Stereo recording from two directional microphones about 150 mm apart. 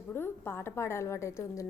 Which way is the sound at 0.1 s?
15° left (ahead or behind).